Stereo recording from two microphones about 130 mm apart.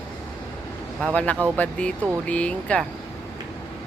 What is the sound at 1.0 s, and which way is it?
Speech, 10° left (ahead or behind).